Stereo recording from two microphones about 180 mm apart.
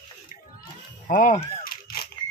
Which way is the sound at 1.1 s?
45° left (ahead or behind).